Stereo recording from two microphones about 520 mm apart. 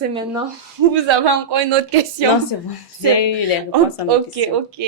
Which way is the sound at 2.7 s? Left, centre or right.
Left.